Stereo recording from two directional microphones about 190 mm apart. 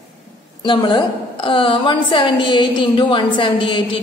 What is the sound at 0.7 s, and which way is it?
A woman's voice, 25° left (ahead or behind).